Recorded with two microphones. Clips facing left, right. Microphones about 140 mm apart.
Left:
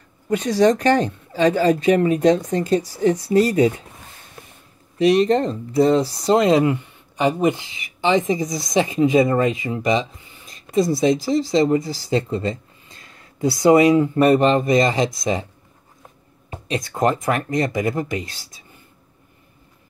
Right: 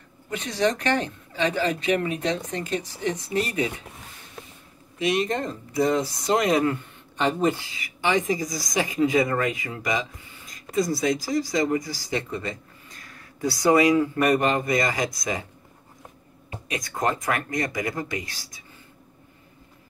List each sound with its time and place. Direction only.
0.3 s a woman's voice: 40° left (ahead or behind)
4.9 s a woman's voice: 35° left (ahead or behind)
6.6 s speech: 15° left (ahead or behind)
16.6 s speech: 25° left (ahead or behind)